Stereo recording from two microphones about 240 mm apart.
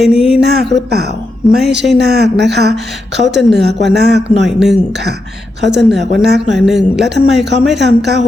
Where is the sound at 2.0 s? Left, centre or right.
Right.